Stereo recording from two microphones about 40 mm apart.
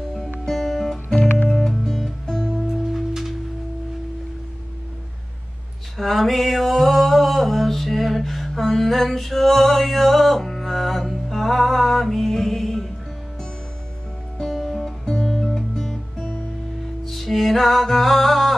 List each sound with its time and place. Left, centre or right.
0.5 s guitar: centre
1.7 s music: centre
2.2 s music: centre
2.8 s music: centre
5.9 s a sound: centre
14.4 s music: centre